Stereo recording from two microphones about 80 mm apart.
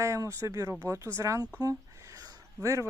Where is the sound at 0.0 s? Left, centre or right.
Right.